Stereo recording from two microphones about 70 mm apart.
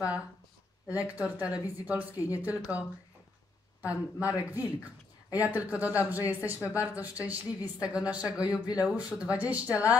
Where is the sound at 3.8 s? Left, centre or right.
Right.